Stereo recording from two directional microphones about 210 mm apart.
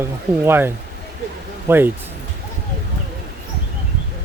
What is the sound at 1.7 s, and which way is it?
Speech, 10° right (ahead or behind).